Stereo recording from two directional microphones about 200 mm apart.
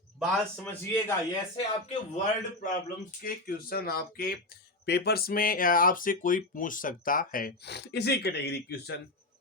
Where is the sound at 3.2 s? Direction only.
45° left (ahead or behind).